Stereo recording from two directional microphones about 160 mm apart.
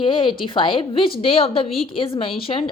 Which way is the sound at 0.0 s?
30° left (ahead or behind).